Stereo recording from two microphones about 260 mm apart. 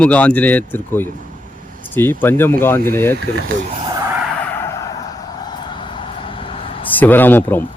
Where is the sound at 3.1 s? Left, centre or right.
Right.